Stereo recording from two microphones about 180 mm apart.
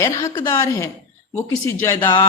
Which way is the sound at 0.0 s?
20° left (ahead or behind).